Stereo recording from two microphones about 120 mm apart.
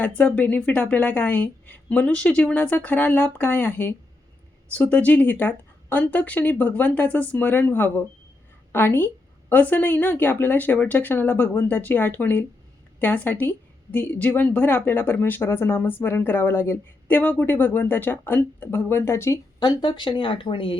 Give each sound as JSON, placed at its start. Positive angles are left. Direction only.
{"t": 0.0, "sound": "a woman's voice", "side_deg": 15}
{"t": 19.5, "sound": "speech", "side_deg": 40}